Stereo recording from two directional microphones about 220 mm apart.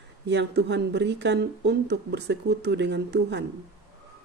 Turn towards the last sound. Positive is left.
turn(degrees=-50)  # may be behind; listen again after turning